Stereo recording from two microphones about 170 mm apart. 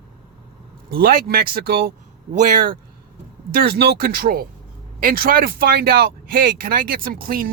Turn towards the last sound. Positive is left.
turn(degrees=-60)  # may be behind; listen again after turning